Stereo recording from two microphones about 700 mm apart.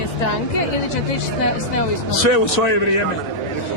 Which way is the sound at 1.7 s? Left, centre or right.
Left.